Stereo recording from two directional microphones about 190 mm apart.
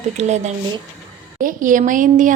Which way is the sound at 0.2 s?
35° right (ahead or behind).